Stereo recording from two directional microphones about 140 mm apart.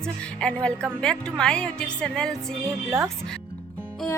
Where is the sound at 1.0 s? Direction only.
5° left (ahead or behind).